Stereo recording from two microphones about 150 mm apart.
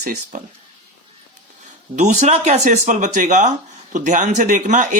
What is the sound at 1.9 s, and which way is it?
Speech, 50° right (ahead or behind).